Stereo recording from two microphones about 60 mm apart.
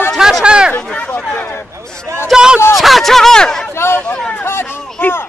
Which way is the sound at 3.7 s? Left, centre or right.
Left.